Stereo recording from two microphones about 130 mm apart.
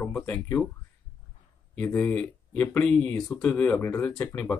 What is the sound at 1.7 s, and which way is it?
Speech, 15° left (ahead or behind).